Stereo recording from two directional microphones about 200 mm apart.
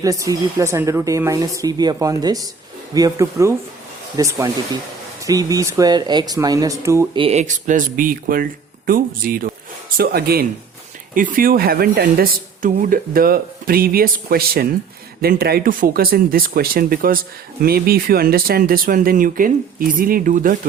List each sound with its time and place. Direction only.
0.0 s speech: 15° right (ahead or behind)
7.2 s speech: 35° right (ahead or behind)